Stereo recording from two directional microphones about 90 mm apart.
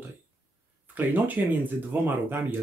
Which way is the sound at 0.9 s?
20° right (ahead or behind).